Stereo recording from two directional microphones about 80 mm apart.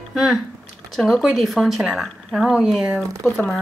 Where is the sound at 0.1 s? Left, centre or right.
Centre.